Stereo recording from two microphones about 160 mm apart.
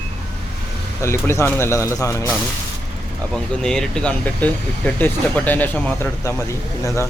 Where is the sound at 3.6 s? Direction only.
5° left (ahead or behind).